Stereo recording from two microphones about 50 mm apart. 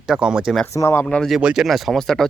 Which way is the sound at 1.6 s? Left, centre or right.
Centre.